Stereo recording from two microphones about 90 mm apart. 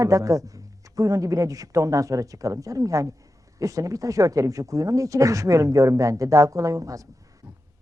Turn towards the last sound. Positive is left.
turn(degrees=-40)  # may be behind; listen again after turning